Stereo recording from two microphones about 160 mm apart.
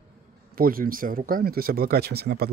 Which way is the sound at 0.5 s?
65° right (ahead or behind).